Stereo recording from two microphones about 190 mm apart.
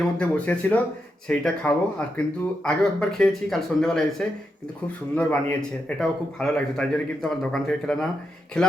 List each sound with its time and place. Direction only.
0.2 s speech: 5° left (ahead or behind)